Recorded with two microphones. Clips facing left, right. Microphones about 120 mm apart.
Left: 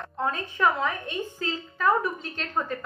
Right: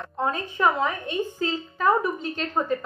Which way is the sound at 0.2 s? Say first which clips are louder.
Right 2 dB; 15° right (ahead or behind).